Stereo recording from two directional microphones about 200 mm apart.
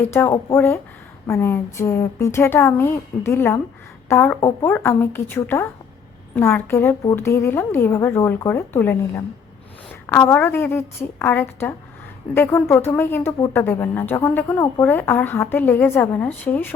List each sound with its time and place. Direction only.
0.0 s speech: 15° left (ahead or behind)